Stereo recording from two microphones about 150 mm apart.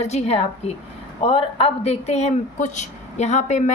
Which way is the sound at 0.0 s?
45° left (ahead or behind).